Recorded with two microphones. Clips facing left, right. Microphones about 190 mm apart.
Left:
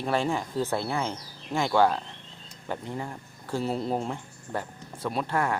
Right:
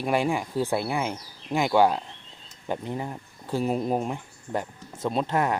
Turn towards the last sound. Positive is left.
turn(degrees=-20)  # may be behind; listen again after turning